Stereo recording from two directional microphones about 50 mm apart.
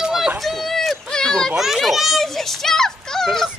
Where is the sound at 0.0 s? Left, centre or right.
Centre.